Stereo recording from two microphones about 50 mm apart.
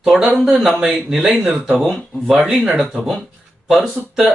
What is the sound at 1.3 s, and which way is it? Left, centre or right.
Speech, right.